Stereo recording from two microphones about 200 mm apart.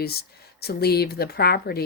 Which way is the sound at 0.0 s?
50° left (ahead or behind).